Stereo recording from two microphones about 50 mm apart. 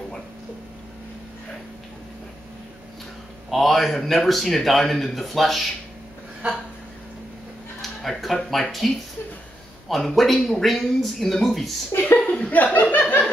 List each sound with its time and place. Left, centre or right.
3.4 s speech: centre
7.8 s speech: centre
12.0 s speech: left
12.9 s a sound: left